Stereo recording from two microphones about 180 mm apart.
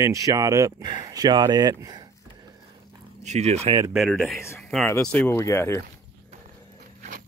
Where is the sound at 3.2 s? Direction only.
40° right (ahead or behind).